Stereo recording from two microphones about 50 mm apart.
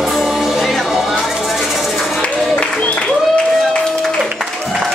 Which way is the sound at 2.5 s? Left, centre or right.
Left.